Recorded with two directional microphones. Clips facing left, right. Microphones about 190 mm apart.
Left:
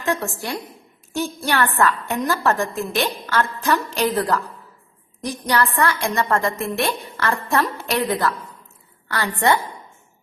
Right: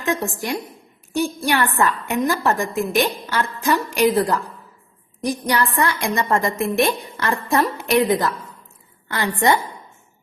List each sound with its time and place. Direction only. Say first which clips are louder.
0.0 s a woman's voice: right 1 dB; 15° right (ahead or behind)